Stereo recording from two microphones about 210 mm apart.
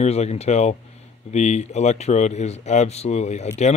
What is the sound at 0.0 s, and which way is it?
Speech, 30° left (ahead or behind).